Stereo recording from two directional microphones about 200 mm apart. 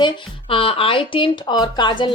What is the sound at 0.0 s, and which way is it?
Speech, 25° left (ahead or behind).